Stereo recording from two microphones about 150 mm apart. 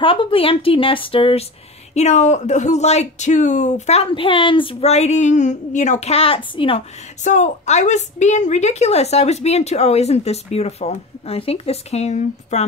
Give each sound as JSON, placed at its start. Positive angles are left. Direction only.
{"t": 0.0, "sound": "speech", "side_deg": 35}
{"t": 2.0, "sound": "a woman's voice", "side_deg": 50}
{"t": 7.2, "sound": "a woman's voice", "side_deg": 50}